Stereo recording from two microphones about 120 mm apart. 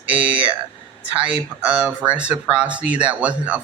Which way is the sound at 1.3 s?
10° right (ahead or behind).